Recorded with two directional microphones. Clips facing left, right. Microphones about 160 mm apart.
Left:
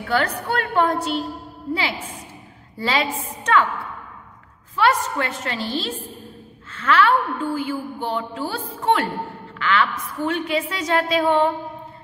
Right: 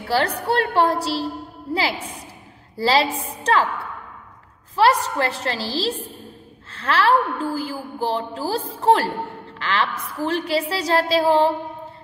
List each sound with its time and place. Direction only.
0.1 s a woman's voice: 30° right (ahead or behind)
4.7 s a woman's voice: 35° right (ahead or behind)
6.7 s a woman's voice: 35° right (ahead or behind)